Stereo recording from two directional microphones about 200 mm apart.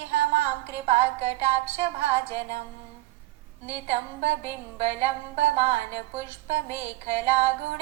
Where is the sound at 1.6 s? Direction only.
30° right (ahead or behind).